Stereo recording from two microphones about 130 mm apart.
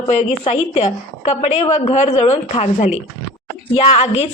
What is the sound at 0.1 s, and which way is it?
A woman's voice, 60° left (ahead or behind).